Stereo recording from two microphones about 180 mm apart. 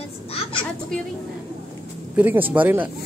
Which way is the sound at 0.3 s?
30° left (ahead or behind).